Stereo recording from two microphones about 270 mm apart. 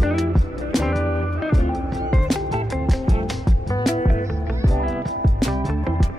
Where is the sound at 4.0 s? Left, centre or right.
Left.